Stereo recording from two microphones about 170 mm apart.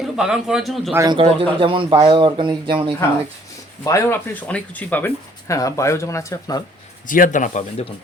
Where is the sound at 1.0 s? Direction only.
30° right (ahead or behind).